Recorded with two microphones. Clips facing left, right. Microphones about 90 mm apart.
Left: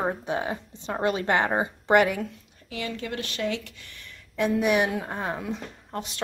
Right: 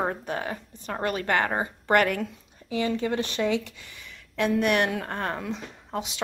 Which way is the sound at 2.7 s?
25° right (ahead or behind).